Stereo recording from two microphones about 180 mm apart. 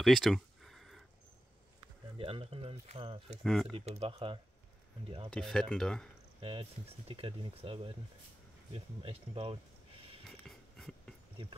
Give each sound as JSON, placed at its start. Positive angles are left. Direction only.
{"t": 0.0, "sound": "a sound", "side_deg": 0}
{"t": 2.1, "sound": "speech", "side_deg": -30}
{"t": 3.4, "sound": "speech", "side_deg": 0}
{"t": 3.7, "sound": "speech", "side_deg": -35}
{"t": 5.3, "sound": "speech", "side_deg": 5}
{"t": 6.4, "sound": "speech", "side_deg": -30}
{"t": 10.2, "sound": "a sound", "side_deg": 0}